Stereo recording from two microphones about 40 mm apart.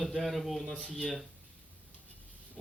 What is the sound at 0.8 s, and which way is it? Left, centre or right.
Speech, right.